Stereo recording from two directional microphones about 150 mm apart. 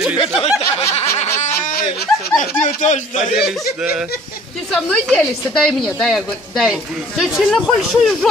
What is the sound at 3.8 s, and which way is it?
Speech, 5° right (ahead or behind).